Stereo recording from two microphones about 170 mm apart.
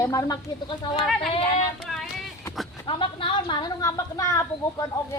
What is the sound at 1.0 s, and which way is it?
Speech, centre (ahead or behind).